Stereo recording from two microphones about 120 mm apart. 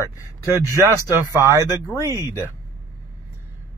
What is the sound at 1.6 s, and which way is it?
Speech, 25° left (ahead or behind).